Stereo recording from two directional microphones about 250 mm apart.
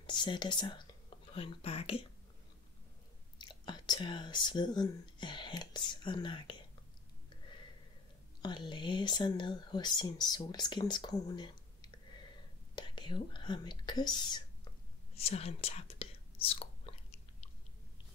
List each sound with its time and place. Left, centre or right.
0.0 s speech: centre
3.3 s speech: centre
8.4 s speech: centre